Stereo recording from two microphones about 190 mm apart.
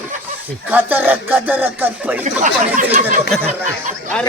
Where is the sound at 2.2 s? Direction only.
40° right (ahead or behind).